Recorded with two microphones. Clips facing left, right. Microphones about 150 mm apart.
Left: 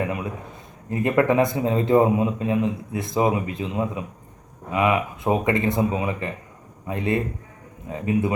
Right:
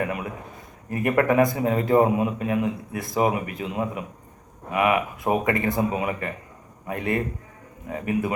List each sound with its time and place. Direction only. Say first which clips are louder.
0.0 s speech: left 1 dB; 25° left (ahead or behind)
4.7 s speech: left 1 dB; 25° left (ahead or behind)